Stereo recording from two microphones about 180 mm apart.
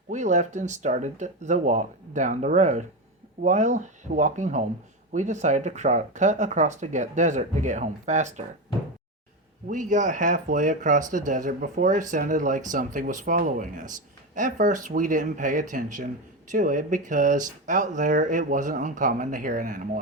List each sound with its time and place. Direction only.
0.1 s speech: 40° right (ahead or behind)
9.6 s speech: 45° right (ahead or behind)